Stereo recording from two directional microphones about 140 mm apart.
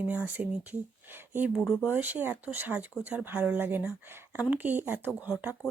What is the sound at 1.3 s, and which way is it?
Speech, 10° right (ahead or behind).